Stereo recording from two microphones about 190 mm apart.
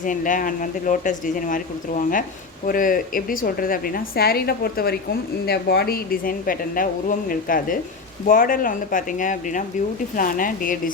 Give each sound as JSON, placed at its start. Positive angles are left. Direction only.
{"t": 0.0, "sound": "a woman's voice", "side_deg": 45}